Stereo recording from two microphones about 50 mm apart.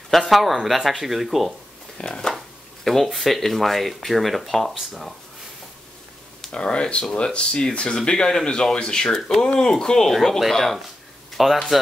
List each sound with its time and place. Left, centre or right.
0.2 s speech: centre
2.0 s chopping: centre
2.3 s speech: centre
6.5 s a man's voice: centre